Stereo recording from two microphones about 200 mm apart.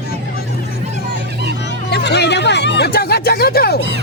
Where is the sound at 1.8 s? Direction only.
55° left (ahead or behind).